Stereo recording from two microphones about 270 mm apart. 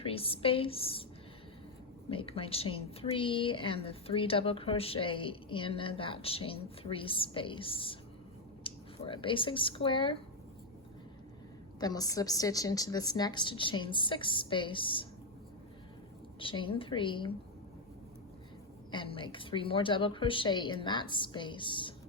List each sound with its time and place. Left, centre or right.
0.0 s a woman's voice: centre
2.0 s a woman's voice: left
11.8 s a woman's voice: centre
16.4 s a woman's voice: centre
18.9 s a woman's voice: centre